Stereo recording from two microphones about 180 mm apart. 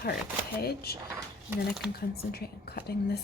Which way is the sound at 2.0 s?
60° left (ahead or behind).